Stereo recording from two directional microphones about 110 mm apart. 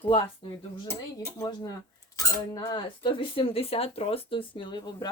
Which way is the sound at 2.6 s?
45° left (ahead or behind).